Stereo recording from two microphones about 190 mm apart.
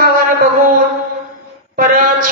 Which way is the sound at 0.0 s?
50° right (ahead or behind).